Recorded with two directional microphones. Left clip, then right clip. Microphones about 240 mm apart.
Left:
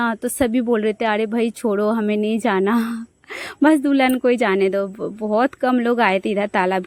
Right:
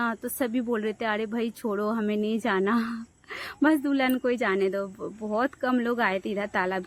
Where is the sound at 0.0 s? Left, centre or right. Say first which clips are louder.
Left 8 dB; left.